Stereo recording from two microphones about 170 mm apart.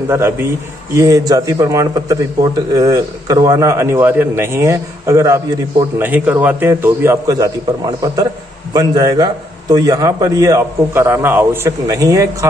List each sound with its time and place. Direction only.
0.1 s a man's voice: 15° right (ahead or behind)